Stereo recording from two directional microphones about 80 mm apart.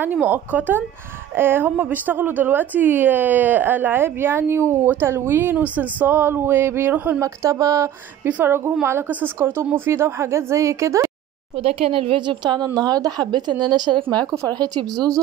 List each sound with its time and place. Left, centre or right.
0.0 s a woman's voice: right
7.2 s a woman's voice: right
8.3 s a woman's voice: right
12.2 s a woman's voice: right
12.6 s speech: right
14.5 s speech: right